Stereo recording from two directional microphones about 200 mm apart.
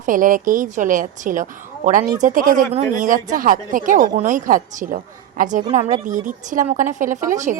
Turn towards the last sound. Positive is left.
turn(degrees=-35)  # may be behind; listen again after turning